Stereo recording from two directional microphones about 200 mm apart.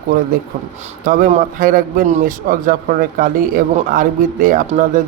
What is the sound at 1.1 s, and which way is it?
A man's voice, 40° right (ahead or behind).